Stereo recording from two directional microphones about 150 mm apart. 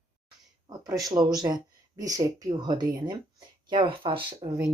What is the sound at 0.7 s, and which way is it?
Speech, 25° right (ahead or behind).